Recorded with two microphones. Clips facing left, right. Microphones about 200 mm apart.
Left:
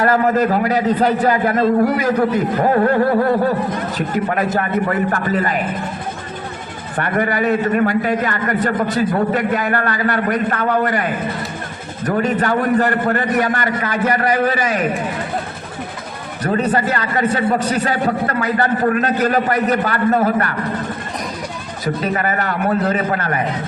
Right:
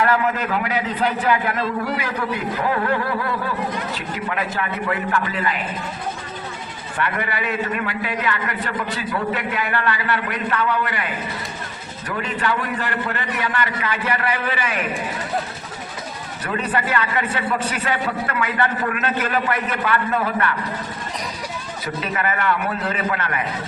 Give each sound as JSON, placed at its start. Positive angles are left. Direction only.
{"t": 0.0, "sound": "a man's voice", "side_deg": 40}
{"t": 6.9, "sound": "a man's voice", "side_deg": 45}
{"t": 16.4, "sound": "a man's voice", "side_deg": 45}
{"t": 22.0, "sound": "a man's voice", "side_deg": 40}